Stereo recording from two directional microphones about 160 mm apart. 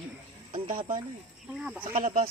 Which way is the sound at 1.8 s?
60° right (ahead or behind).